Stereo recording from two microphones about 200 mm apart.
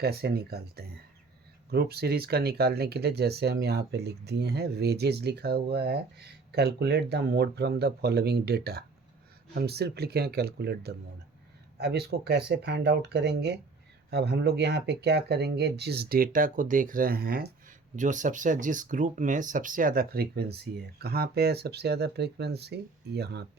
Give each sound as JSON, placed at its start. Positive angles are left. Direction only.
{"t": 0.0, "sound": "speech", "side_deg": -50}